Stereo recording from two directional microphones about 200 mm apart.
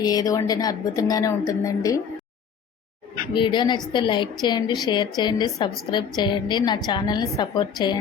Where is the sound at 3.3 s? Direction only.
25° left (ahead or behind).